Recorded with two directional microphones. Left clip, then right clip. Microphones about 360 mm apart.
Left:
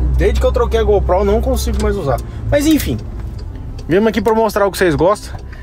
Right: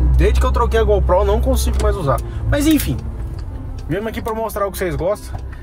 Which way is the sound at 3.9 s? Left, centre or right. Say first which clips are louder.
Left 9 dB; left.